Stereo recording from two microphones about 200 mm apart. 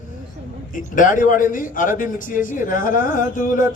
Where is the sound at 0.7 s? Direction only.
40° left (ahead or behind).